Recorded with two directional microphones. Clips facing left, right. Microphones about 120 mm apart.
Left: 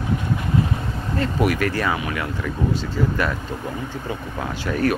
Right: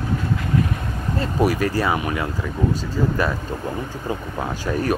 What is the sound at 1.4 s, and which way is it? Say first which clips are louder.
Speech: right 3 dB; 25° right (ahead or behind).